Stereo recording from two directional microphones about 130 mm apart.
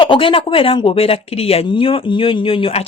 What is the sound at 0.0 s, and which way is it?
Speech, 40° left (ahead or behind).